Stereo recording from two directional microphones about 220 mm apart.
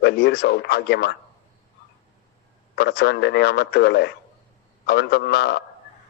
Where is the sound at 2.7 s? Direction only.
50° left (ahead or behind).